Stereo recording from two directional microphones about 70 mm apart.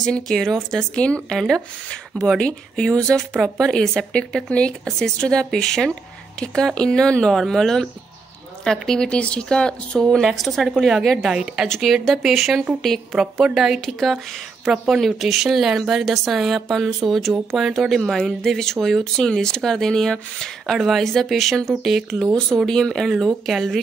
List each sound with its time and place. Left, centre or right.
0.0 s speech: centre
0.9 s speech: centre
2.1 s speech: centre
3.3 s speech: centre
3.6 s speech: centre
10.2 s a woman's voice: centre